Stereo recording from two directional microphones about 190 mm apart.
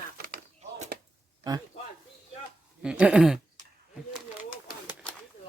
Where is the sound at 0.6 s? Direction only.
35° right (ahead or behind).